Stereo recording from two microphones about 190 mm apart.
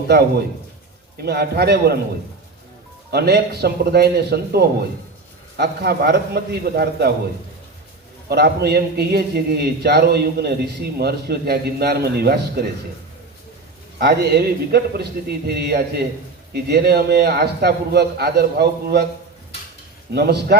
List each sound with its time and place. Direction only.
1.2 s a man's voice: 60° right (ahead or behind)
3.1 s a man's voice: 55° right (ahead or behind)
8.3 s a man's voice: 55° right (ahead or behind)
14.0 s a man's voice: 55° right (ahead or behind)
20.1 s a man's voice: 60° right (ahead or behind)